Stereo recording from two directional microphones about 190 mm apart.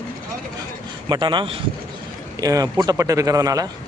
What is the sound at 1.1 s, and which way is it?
Speech, 25° right (ahead or behind).